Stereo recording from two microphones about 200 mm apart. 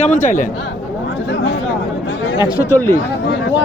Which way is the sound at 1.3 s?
65° left (ahead or behind).